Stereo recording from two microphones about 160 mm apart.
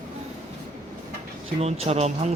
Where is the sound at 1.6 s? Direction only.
40° right (ahead or behind).